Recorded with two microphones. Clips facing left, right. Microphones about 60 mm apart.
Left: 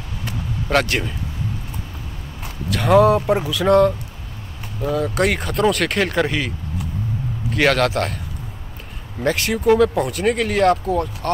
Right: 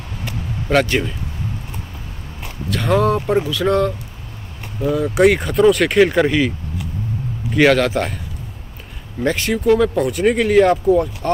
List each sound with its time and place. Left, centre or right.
0.7 s speech: centre
2.7 s speech: centre
7.5 s speech: centre
9.2 s speech: centre